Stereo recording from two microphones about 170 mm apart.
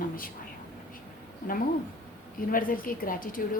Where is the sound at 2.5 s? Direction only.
55° left (ahead or behind).